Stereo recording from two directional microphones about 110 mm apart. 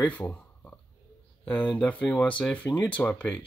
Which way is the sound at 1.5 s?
15° left (ahead or behind).